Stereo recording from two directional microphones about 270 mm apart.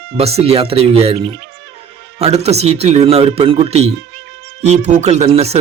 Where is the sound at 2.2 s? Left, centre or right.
Right.